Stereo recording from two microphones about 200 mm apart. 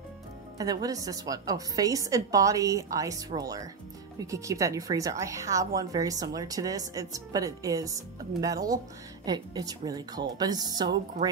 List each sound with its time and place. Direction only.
0.6 s a woman's voice: 20° right (ahead or behind)